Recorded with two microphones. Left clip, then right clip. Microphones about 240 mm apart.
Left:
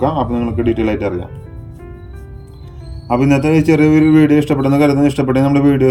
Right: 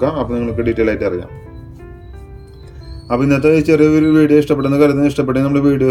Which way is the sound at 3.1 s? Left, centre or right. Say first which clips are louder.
Right 1 dB; centre.